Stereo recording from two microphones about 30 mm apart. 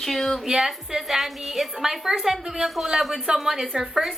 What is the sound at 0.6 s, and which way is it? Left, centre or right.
A woman's voice, centre.